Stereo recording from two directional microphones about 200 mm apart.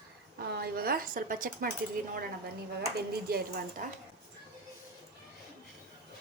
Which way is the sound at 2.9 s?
50° right (ahead or behind).